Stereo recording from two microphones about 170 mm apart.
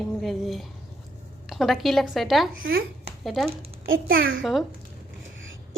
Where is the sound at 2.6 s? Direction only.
65° right (ahead or behind).